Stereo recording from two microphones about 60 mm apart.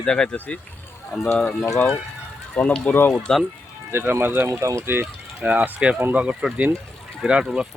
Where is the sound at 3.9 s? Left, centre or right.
Right.